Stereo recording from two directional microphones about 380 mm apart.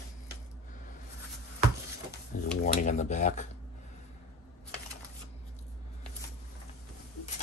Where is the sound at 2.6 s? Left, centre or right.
Centre.